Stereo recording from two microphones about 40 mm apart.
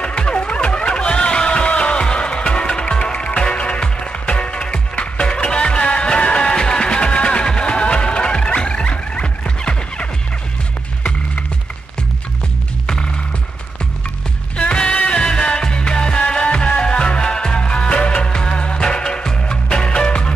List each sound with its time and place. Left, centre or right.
0.0 s music: left
8.5 s a sound: left
14.7 s music: left